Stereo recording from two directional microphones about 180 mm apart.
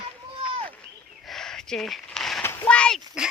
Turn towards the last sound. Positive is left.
turn(degrees=5)  # may be behind; listen again after turning